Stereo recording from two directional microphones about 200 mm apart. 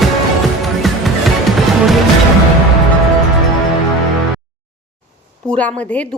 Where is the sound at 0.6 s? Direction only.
Centre (ahead or behind).